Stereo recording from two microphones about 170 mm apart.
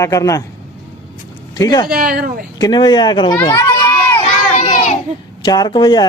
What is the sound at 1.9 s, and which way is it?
Speech, 65° right (ahead or behind).